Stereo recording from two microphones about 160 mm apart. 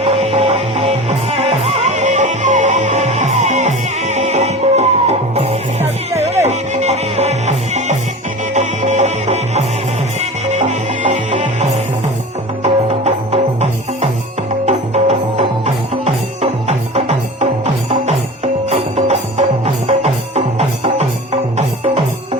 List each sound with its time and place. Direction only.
0.0 s music: 40° right (ahead or behind)
18.7 s music: 40° right (ahead or behind)